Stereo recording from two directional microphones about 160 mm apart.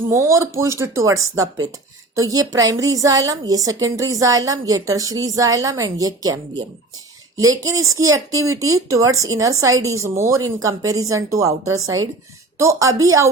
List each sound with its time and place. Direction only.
0.1 s a woman's voice: 20° right (ahead or behind)